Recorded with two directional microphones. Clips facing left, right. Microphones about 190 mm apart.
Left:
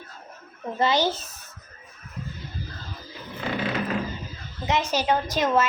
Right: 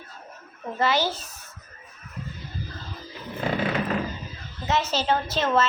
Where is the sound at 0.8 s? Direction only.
15° left (ahead or behind).